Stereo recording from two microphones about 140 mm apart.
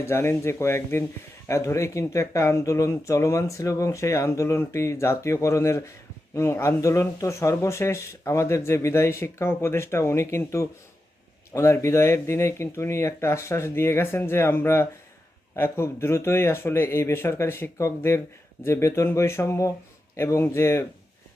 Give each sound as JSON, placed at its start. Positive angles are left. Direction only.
{"t": 0.0, "sound": "speech", "side_deg": 20}